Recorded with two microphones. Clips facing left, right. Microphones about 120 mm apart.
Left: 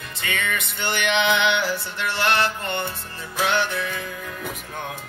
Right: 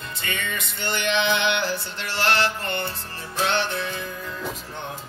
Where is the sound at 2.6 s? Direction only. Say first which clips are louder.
Left 1 dB; 20° left (ahead or behind).